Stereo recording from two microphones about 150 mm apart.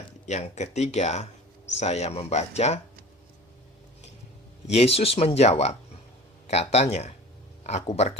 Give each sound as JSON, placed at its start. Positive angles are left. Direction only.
{"t": 0.3, "sound": "speech", "side_deg": 50}
{"t": 4.6, "sound": "speech", "side_deg": 45}